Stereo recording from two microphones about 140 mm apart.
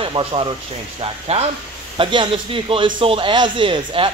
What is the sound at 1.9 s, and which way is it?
Speech, 35° right (ahead or behind).